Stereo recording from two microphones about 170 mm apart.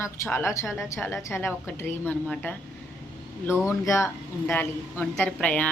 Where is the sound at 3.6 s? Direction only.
15° left (ahead or behind).